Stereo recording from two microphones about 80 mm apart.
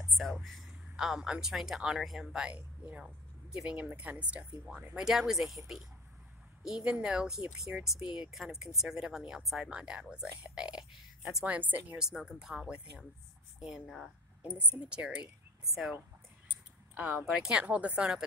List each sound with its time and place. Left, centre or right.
0.2 s speech: centre
4.6 s speech: centre
11.4 s speech: centre
12.0 s speech: centre
14.6 s speech: centre
15.6 s speech: centre
16.9 s speech: centre
17.2 s speech: centre
17.6 s speech: centre